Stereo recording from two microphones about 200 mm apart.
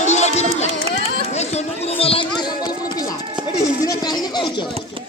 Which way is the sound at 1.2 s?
35° left (ahead or behind).